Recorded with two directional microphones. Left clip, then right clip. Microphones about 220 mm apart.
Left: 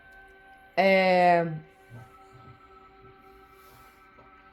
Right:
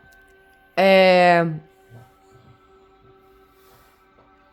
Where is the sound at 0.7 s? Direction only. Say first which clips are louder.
Right 7 dB; 25° right (ahead or behind).